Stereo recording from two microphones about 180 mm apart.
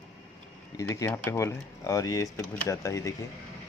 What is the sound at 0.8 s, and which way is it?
Speech, 15° left (ahead or behind).